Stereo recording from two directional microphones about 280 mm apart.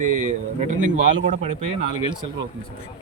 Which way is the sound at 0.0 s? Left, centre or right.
Right.